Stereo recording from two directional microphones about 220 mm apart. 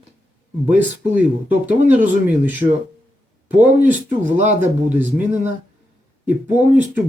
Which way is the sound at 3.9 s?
35° right (ahead or behind).